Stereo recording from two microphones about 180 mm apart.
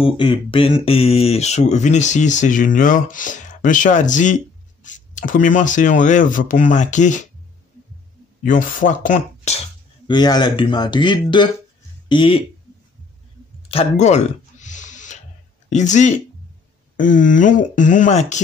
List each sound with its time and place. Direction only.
0.0 s speech: 30° left (ahead or behind)
8.5 s speech: 45° left (ahead or behind)
10.0 s speech: 25° left (ahead or behind)
13.7 s a sound: 35° left (ahead or behind)
15.7 s speech: 40° left (ahead or behind)